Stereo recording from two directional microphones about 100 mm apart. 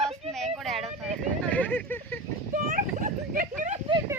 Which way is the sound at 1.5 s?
15° left (ahead or behind).